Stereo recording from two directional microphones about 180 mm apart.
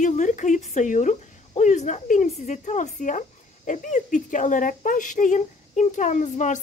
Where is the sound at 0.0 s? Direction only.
40° left (ahead or behind).